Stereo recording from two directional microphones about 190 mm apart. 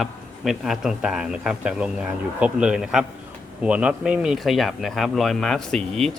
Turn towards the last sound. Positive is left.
turn(degrees=0)  # may be behind; listen again after turning